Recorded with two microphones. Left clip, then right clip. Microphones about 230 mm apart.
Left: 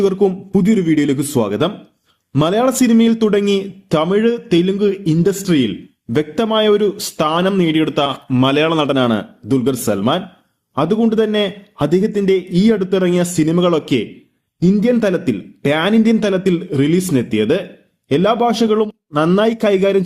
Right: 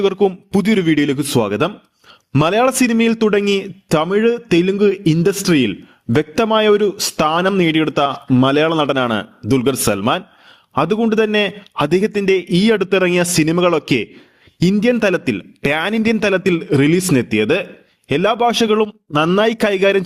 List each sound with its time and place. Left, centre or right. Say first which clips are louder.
0.0 s a man's voice: left 1 dB; right